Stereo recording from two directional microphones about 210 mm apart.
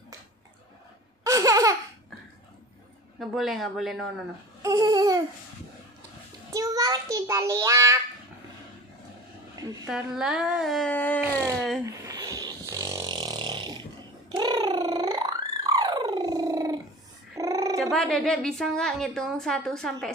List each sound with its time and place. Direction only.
1.2 s laughter: 15° right (ahead or behind)
3.2 s a woman's voice: centre (ahead or behind)
4.6 s babbling: 15° right (ahead or behind)
6.5 s a child's voice: 15° right (ahead or behind)
9.6 s a sound: 15° right (ahead or behind)
9.8 s a woman's voice: centre (ahead or behind)
11.8 s dog: 15° right (ahead or behind)
14.3 s a sound: 20° right (ahead or behind)
17.9 s a woman's voice: centre (ahead or behind)